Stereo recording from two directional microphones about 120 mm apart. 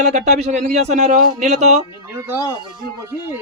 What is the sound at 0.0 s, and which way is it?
A man's voice, 75° right (ahead or behind).